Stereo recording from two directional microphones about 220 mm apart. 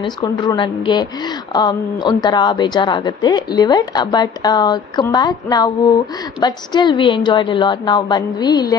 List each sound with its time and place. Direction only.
0.0 s a woman's voice: 15° left (ahead or behind)